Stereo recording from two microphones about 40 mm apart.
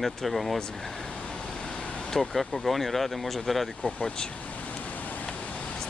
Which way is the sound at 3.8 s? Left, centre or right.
Left.